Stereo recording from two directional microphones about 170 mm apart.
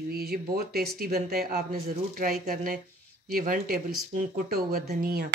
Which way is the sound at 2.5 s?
55° right (ahead or behind).